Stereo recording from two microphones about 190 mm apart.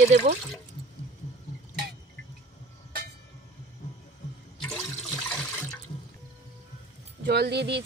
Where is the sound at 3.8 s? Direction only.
40° left (ahead or behind).